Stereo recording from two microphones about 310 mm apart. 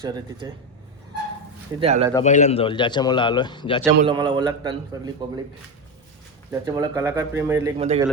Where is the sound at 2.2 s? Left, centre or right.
Left.